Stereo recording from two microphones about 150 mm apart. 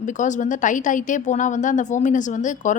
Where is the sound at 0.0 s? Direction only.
55° left (ahead or behind).